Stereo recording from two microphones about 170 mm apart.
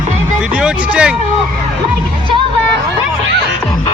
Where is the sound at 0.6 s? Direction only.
5° right (ahead or behind).